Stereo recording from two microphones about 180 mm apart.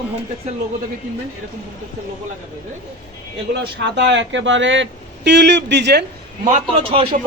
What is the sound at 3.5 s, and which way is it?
Speech, 75° right (ahead or behind).